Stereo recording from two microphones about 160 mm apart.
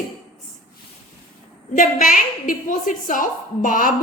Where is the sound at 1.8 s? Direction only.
60° left (ahead or behind).